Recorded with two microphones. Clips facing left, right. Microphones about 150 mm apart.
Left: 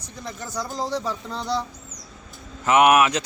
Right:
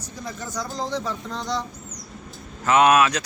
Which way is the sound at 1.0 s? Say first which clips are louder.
Left 1 dB; 5° left (ahead or behind).